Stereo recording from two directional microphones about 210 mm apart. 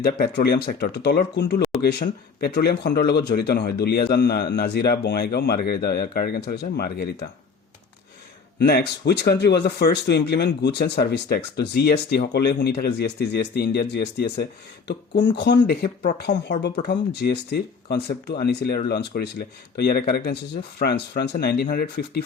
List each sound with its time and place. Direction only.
0.0 s speech: 50° left (ahead or behind)
8.5 s speech: 50° left (ahead or behind)